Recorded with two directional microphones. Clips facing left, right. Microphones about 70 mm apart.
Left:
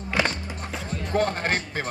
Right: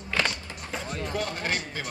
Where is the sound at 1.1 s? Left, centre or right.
Left.